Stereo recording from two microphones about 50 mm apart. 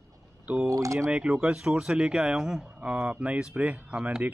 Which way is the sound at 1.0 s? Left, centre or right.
Right.